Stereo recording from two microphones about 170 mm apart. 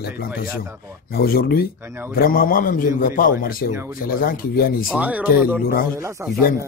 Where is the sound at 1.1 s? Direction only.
65° left (ahead or behind).